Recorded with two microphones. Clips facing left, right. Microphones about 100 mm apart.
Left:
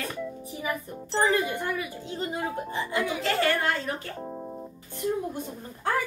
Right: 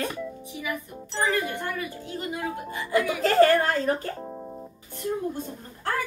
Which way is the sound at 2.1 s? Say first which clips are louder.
Left 1 dB; 30° left (ahead or behind).